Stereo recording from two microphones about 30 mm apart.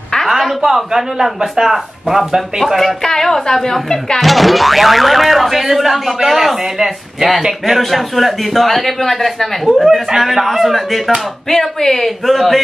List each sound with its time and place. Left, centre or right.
0.3 s a sound: centre
0.9 s speech: centre
2.7 s speech: centre
3.0 s speech: centre
4.2 s speech: centre
9.7 s speech: centre
11.4 s speech: centre